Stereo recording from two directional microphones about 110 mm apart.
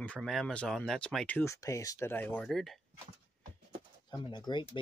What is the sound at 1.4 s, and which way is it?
Speech, 30° left (ahead or behind).